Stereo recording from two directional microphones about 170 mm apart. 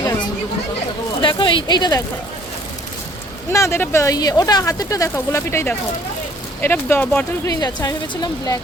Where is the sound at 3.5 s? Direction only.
15° left (ahead or behind).